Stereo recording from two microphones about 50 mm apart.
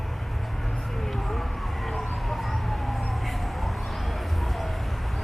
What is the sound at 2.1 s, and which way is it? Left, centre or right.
Emergency vehicle, centre.